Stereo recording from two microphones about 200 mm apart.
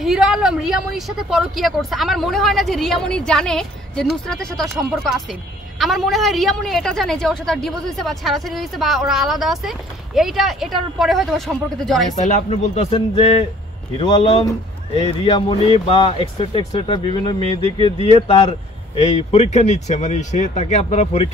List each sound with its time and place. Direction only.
0.0 s a woman's voice: 5° right (ahead or behind)
12.2 s speech: 35° left (ahead or behind)